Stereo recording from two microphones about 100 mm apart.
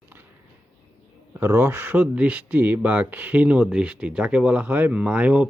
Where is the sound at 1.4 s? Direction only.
25° right (ahead or behind).